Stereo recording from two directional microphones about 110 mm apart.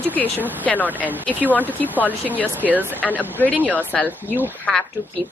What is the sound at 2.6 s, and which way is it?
Speech, 15° right (ahead or behind).